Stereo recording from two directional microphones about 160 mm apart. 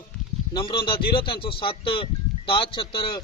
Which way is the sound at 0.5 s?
30° left (ahead or behind).